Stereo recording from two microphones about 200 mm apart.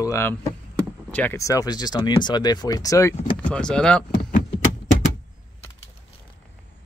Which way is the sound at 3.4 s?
5° left (ahead or behind).